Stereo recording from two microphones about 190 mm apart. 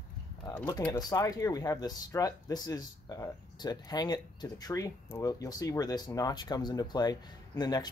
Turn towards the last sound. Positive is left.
turn(degrees=20)  # may be behind; listen again after turning